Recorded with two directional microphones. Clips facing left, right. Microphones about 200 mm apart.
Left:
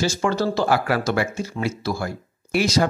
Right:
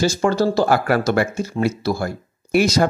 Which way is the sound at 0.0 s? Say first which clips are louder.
Right 4 dB; 40° right (ahead or behind).